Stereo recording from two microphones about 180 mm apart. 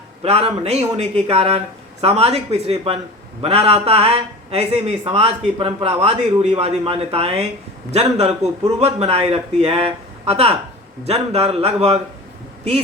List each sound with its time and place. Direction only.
0.2 s a man's voice: 30° right (ahead or behind)